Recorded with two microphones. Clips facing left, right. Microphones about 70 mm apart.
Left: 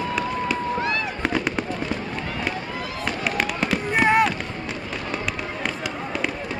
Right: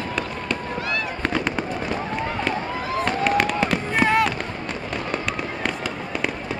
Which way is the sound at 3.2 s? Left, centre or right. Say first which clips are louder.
Right 4 dB; centre.